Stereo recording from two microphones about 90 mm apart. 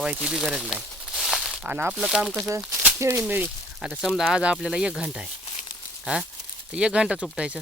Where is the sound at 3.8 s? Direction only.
5° right (ahead or behind).